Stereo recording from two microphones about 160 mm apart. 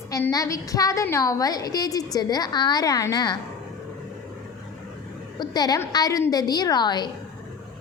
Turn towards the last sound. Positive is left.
turn(degrees=25)  # may be behind; listen again after turning